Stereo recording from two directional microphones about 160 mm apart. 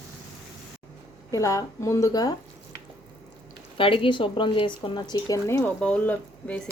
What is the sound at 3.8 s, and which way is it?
Speech, 35° left (ahead or behind).